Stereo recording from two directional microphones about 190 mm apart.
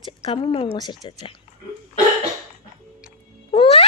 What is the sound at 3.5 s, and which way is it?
Cat, 30° left (ahead or behind).